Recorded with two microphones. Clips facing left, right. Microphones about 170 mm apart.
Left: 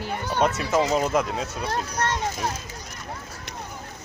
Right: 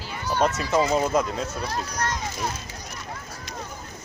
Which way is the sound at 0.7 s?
5° left (ahead or behind).